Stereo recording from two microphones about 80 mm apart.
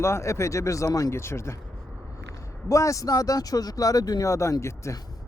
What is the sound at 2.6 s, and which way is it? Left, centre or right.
Speech, left.